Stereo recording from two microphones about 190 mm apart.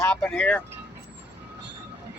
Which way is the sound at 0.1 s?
5° left (ahead or behind).